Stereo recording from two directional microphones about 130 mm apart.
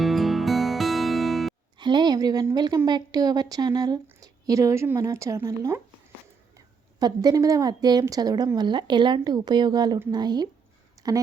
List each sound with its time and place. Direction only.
0.0 s music: centre (ahead or behind)
1.8 s a woman's voice: 35° right (ahead or behind)
7.0 s a woman's voice: 30° right (ahead or behind)